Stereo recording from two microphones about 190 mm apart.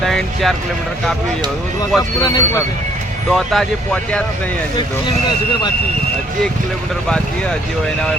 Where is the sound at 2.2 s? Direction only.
20° left (ahead or behind).